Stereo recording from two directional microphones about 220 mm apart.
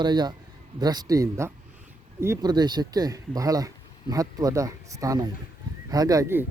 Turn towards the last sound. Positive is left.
turn(degrees=-10)  # may be behind; listen again after turning